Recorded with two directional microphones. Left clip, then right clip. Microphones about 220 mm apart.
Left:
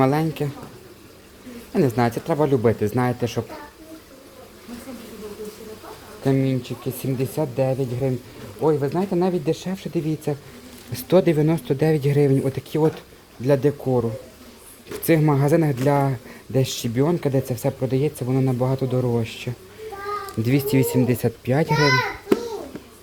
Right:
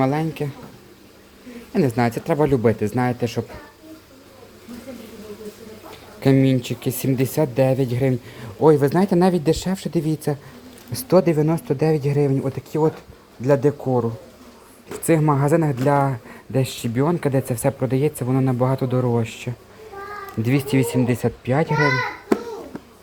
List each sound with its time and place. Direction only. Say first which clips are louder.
0.0 s speech: left 1 dB; centre (ahead or behind)
1.7 s speech: even; 5° right (ahead or behind)
6.2 s speech: right 4 dB; 20° right (ahead or behind)
10.9 s speech: right 1 dB; centre (ahead or behind)